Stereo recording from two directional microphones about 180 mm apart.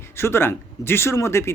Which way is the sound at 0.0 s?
15° left (ahead or behind).